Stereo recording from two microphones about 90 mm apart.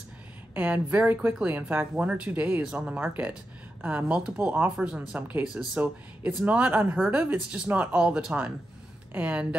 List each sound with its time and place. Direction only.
0.6 s speech: 20° right (ahead or behind)